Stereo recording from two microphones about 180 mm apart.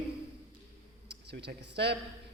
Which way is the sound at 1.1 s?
70° right (ahead or behind).